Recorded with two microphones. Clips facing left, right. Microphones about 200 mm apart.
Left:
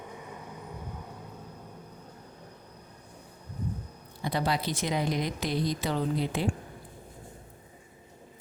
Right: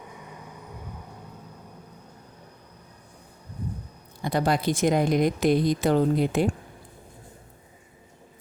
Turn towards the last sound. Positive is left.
turn(degrees=-50)  # may be behind; listen again after turning